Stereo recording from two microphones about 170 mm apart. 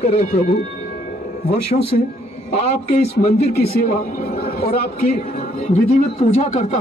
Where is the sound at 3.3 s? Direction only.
65° left (ahead or behind).